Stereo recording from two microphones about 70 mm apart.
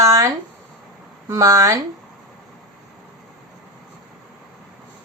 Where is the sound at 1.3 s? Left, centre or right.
Right.